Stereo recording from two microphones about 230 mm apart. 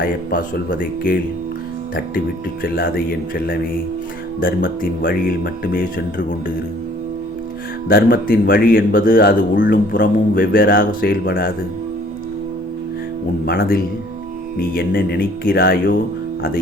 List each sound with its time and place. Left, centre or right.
0.0 s speech: left
2.7 s speech: left
7.9 s speech: left
13.4 s speech: left